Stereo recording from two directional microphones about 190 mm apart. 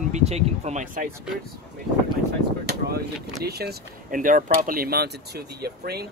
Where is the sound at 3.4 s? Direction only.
55° right (ahead or behind).